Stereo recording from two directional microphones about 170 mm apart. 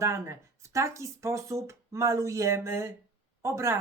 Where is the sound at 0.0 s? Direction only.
15° right (ahead or behind).